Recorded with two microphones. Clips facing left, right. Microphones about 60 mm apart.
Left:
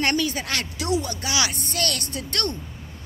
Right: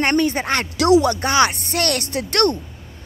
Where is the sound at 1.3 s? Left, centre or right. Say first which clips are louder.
Right 7 dB; right.